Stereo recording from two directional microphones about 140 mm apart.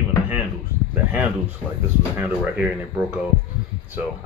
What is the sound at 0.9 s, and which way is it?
Speech, 15° right (ahead or behind).